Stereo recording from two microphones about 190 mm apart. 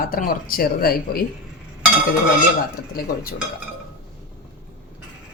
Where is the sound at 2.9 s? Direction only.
50° left (ahead or behind).